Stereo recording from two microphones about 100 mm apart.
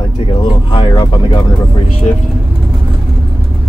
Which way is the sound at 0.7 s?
50° left (ahead or behind).